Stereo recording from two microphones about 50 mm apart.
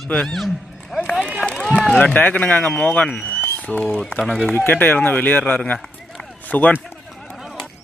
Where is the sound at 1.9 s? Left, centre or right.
Left.